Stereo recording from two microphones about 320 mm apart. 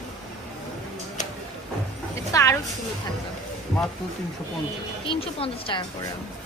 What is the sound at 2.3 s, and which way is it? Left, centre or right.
Speech, centre.